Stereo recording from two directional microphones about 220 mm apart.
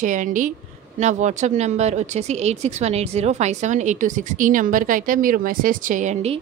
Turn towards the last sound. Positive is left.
turn(degrees=-35)  # may be behind; listen again after turning